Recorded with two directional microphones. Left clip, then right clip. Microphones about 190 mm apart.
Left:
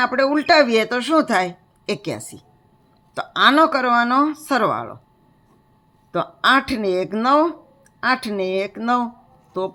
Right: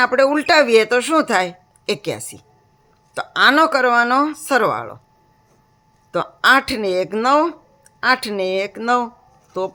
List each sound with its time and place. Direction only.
0.0 s speech: 20° right (ahead or behind)
6.1 s speech: 15° right (ahead or behind)